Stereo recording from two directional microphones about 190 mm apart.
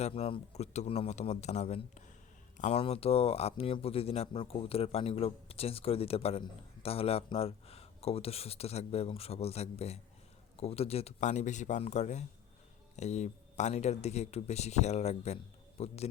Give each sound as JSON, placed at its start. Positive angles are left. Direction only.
{"t": 0.0, "sound": "speech", "side_deg": 30}